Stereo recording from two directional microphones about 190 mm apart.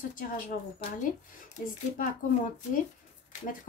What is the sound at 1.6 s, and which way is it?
Speech, 45° left (ahead or behind).